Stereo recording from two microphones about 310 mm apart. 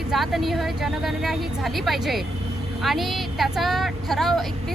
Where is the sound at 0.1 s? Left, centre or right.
Centre.